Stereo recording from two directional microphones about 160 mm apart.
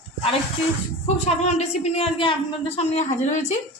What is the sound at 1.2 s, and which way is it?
A woman's voice, 45° left (ahead or behind).